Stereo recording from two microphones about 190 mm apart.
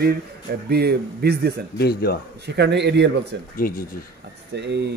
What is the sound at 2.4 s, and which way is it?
Speech, 65° right (ahead or behind).